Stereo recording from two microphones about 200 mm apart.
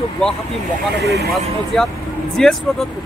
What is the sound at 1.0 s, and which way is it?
Speech, 55° right (ahead or behind).